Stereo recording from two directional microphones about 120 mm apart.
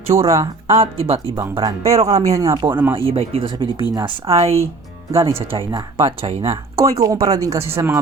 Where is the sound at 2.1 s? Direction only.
30° right (ahead or behind).